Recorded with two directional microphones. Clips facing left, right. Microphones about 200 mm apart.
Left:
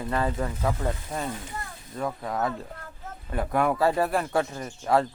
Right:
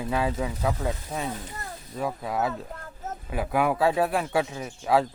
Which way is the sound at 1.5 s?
45° right (ahead or behind).